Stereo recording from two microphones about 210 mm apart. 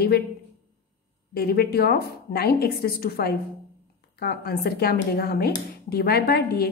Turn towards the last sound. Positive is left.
turn(degrees=45)  # may be behind; listen again after turning